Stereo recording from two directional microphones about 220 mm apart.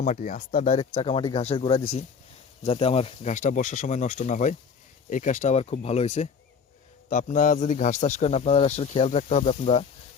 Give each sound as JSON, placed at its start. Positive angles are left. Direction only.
{"t": 0.0, "sound": "a man's voice", "side_deg": 35}